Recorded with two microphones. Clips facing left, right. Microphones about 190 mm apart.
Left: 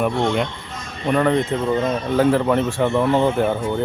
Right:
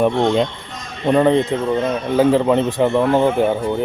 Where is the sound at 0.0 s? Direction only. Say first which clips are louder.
Right 4 dB; 20° right (ahead or behind).